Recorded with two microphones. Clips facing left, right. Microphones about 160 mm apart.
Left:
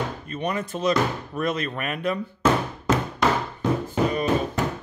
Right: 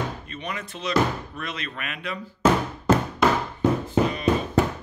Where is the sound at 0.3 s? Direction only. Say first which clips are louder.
Left 7 dB; 45° left (ahead or behind).